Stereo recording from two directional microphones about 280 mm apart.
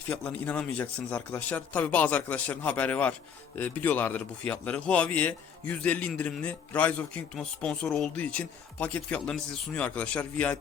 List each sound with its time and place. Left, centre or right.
0.1 s a man's voice: centre